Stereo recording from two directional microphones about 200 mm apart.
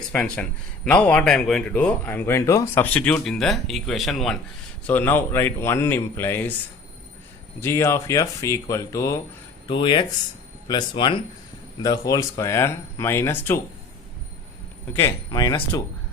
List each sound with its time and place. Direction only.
0.1 s speech: 5° left (ahead or behind)
7.6 s speech: 15° left (ahead or behind)
14.9 s speech: 15° left (ahead or behind)